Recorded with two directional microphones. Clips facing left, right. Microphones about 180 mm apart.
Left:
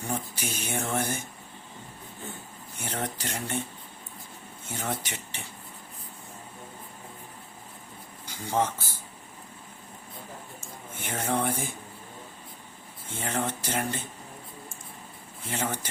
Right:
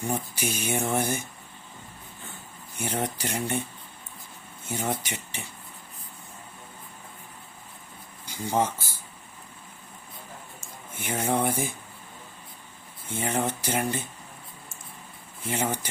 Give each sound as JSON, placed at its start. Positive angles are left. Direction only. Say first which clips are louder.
{"t": 0.0, "sound": "speech", "louder": "right 3 dB", "side_deg": -10}
{"t": 2.7, "sound": "speech", "louder": "right 4 dB", "side_deg": -10}
{"t": 4.7, "sound": "speech", "louder": "right 3 dB", "side_deg": -15}
{"t": 8.4, "sound": "speech", "louder": "right 1 dB", "side_deg": -10}
{"t": 11.0, "sound": "speech", "louder": "right 3 dB", "side_deg": -10}
{"t": 13.1, "sound": "speech", "louder": "right 3 dB", "side_deg": -10}
{"t": 15.4, "sound": "speech", "louder": "right 3 dB", "side_deg": -15}